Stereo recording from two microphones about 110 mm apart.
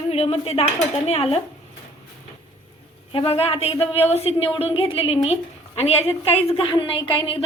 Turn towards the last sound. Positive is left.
turn(degrees=55)  # may be behind; listen again after turning